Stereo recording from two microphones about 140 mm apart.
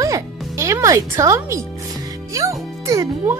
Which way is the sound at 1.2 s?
20° right (ahead or behind).